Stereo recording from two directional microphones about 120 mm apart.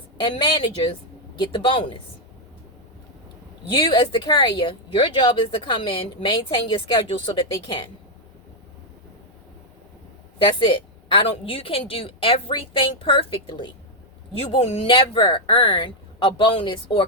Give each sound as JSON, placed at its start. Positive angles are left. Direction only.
{"t": 0.3, "sound": "a woman's voice", "side_deg": 40}
{"t": 3.8, "sound": "speech", "side_deg": 40}
{"t": 10.3, "sound": "speech", "side_deg": 45}
{"t": 14.3, "sound": "speech", "side_deg": 55}